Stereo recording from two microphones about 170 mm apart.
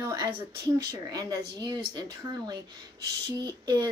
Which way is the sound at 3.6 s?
25° right (ahead or behind).